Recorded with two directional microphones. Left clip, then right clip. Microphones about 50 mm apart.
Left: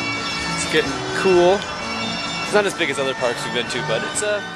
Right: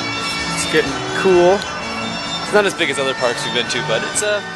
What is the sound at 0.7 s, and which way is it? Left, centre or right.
Speech, right.